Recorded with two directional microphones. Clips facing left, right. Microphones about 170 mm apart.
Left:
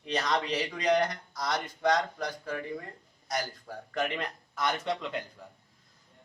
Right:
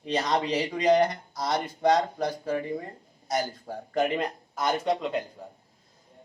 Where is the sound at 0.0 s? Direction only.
35° right (ahead or behind).